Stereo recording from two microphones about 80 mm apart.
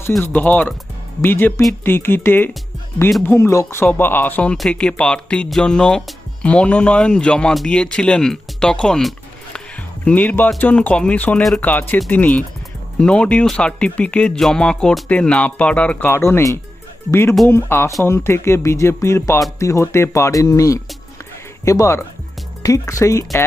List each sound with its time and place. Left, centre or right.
0.2 s speech: left
3.3 s speech: left
3.8 s speech: left; by 9.6 s centre
10.0 s speech: centre; by 23.4 s left